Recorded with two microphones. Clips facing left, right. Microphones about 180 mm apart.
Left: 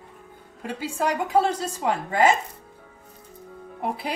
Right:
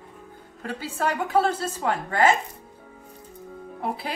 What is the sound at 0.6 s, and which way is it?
A woman's voice, 10° left (ahead or behind).